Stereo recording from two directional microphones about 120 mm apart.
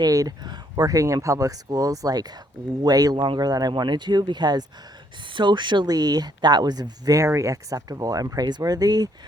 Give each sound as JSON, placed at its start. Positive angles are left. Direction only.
{"t": 0.0, "sound": "speech", "side_deg": -30}